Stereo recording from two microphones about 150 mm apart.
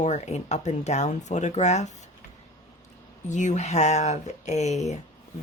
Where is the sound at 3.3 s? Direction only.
55° left (ahead or behind).